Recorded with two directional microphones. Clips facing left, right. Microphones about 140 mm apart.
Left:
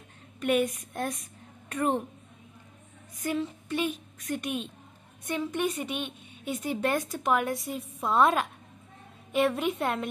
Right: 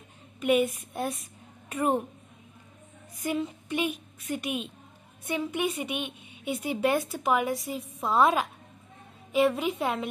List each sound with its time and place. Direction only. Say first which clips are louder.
0.4 s a woman's voice: right 2 dB; 10° right (ahead or behind)
3.3 s a woman's voice: even; 10° right (ahead or behind)